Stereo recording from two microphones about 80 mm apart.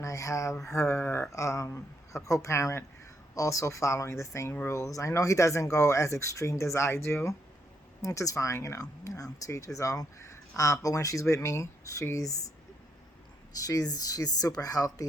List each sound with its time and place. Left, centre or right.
0.0 s a sound: left
0.7 s speech: left
1.3 s speech: left
8.0 s speech: left
13.5 s speech: left